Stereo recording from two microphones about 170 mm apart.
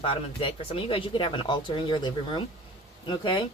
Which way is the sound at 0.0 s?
30° left (ahead or behind).